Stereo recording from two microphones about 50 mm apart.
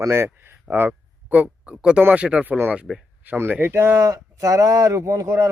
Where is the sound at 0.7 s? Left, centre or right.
Right.